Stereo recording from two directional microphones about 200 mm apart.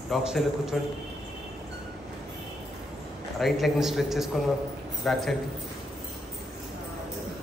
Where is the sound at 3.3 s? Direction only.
Centre (ahead or behind).